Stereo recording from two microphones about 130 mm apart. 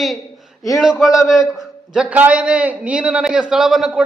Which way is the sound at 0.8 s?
5° right (ahead or behind).